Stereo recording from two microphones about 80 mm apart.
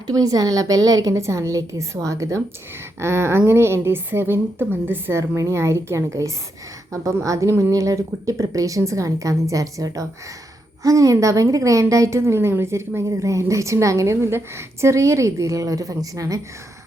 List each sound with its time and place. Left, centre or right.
0.1 s a woman's voice: right
5.4 s a woman's voice: right